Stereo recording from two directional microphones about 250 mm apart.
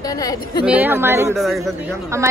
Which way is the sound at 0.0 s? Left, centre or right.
Centre.